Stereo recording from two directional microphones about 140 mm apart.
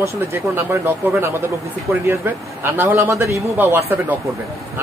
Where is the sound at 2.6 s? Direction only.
15° right (ahead or behind).